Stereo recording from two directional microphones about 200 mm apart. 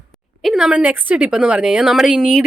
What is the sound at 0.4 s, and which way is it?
A man's voice, centre (ahead or behind).